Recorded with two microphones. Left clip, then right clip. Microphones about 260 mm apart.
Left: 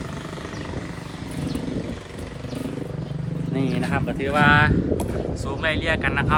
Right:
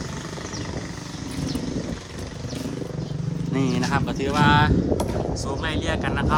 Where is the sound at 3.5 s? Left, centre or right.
Centre.